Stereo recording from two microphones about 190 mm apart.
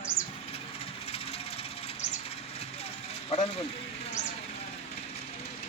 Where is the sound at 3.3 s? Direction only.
30° left (ahead or behind).